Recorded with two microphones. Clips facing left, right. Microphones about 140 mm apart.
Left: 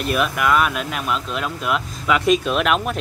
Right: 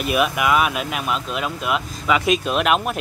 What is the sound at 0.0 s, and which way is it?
Speech, 5° right (ahead or behind).